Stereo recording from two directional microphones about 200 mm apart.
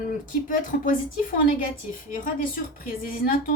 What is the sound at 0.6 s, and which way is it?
A woman's voice, 45° left (ahead or behind).